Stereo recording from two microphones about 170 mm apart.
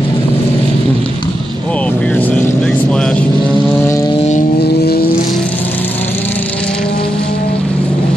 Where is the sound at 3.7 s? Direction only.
15° left (ahead or behind).